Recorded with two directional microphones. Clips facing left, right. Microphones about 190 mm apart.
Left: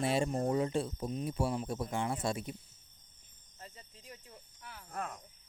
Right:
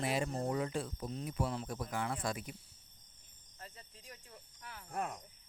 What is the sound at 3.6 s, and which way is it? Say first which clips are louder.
Cricket: left 1 dB; 10° left (ahead or behind).